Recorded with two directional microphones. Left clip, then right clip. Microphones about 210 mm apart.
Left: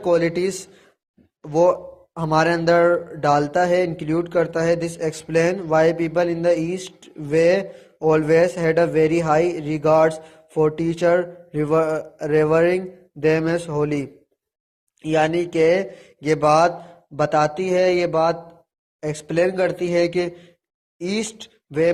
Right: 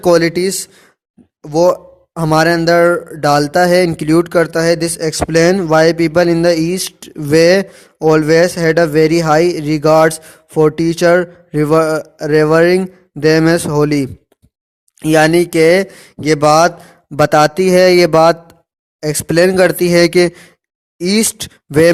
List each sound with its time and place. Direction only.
0.0 s speech: 45° right (ahead or behind)